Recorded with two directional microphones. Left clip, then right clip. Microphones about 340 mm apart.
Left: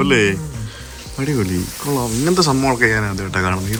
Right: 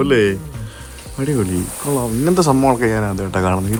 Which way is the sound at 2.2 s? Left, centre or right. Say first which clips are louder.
Right 2 dB; centre.